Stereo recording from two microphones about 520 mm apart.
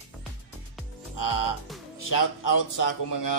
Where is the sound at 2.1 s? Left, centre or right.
Left.